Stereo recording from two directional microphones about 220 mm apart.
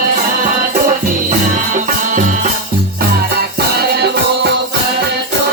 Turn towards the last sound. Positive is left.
turn(degrees=-45)  # may be behind; listen again after turning